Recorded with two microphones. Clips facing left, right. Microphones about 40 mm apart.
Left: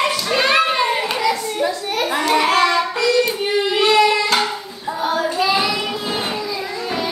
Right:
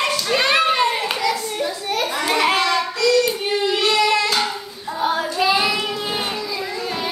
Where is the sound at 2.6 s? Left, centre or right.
Centre.